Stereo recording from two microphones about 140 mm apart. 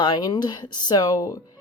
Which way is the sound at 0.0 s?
30° left (ahead or behind).